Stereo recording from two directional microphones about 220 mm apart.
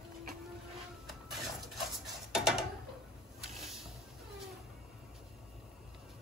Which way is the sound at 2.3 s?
Centre (ahead or behind).